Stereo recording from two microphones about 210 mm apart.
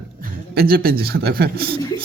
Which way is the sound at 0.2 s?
45° right (ahead or behind).